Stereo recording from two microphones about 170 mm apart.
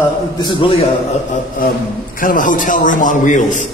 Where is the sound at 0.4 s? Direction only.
25° left (ahead or behind).